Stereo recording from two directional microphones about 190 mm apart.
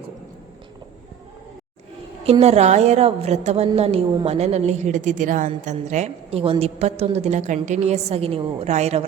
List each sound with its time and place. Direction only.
2.2 s a woman's voice: 30° right (ahead or behind)